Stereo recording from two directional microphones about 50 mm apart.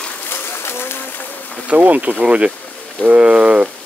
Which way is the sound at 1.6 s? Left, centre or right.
Right.